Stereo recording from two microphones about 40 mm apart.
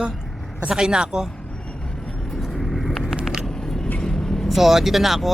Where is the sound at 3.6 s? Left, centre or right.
Centre.